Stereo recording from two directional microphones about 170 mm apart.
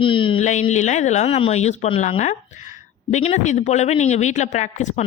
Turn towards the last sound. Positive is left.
turn(degrees=45)  # may be behind; listen again after turning